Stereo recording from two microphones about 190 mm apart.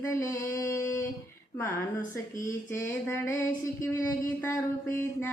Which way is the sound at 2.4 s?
15° left (ahead or behind).